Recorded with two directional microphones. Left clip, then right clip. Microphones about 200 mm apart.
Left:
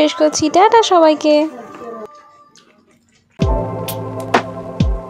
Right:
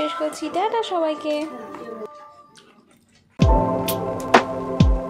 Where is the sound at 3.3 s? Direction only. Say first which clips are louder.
Right 1 dB; centre (ahead or behind).